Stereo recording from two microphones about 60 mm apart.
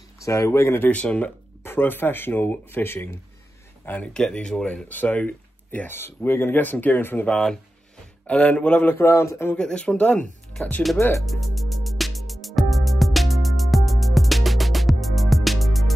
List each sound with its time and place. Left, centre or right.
0.2 s speech: left
0.5 s speech: left
0.8 s speech: left
1.6 s speech: left
4.1 s speech: centre
4.8 s speech: left
5.9 s speech: left
7.2 s speech: centre
8.9 s speech: left
9.6 s speech: centre
11.2 s music: centre